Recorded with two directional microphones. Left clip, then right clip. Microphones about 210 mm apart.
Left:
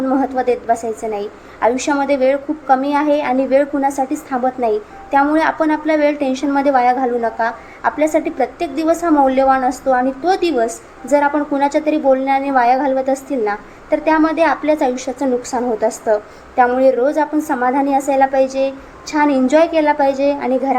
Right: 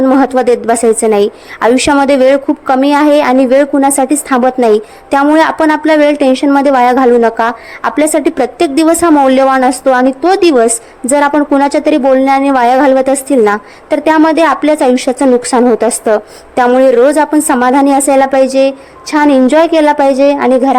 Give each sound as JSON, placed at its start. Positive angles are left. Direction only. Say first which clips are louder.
{"t": 0.0, "sound": "a woman's voice", "louder": "right 8 dB", "side_deg": -40}